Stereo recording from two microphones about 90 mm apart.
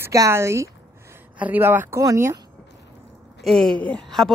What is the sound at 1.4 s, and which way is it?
Speech, 20° right (ahead or behind).